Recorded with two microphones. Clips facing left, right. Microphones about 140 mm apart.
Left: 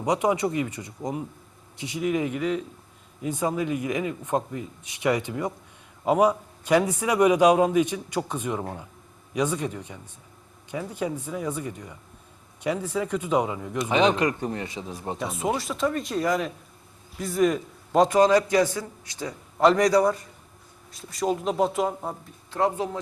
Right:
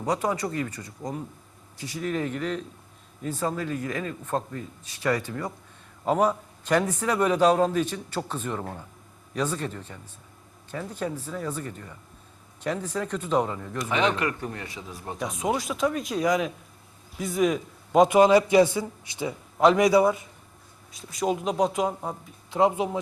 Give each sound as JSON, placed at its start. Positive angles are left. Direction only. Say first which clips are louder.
{"t": 0.0, "sound": "a man's voice", "louder": "left 3 dB", "side_deg": 20}
{"t": 15.2, "sound": "a man's voice", "louder": "right 1 dB", "side_deg": 5}
{"t": 19.3, "sound": "speech", "louder": "even", "side_deg": -5}
{"t": 22.5, "sound": "speech", "louder": "right 2 dB", "side_deg": -15}